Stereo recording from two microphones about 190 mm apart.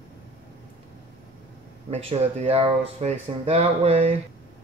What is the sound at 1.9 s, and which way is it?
Speech, 30° right (ahead or behind).